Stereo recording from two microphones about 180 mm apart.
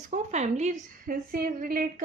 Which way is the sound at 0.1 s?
40° right (ahead or behind).